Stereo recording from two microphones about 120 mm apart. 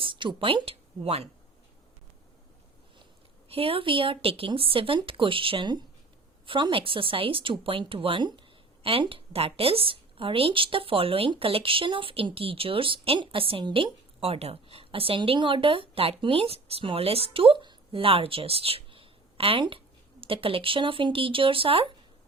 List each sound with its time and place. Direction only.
0.0 s a woman's voice: 45° right (ahead or behind)
3.5 s a woman's voice: 50° right (ahead or behind)